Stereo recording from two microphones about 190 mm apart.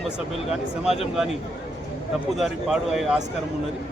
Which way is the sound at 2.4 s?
Centre (ahead or behind).